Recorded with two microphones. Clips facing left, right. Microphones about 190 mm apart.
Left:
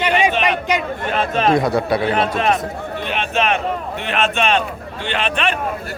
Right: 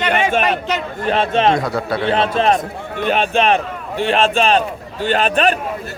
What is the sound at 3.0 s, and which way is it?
A man's voice, 40° right (ahead or behind).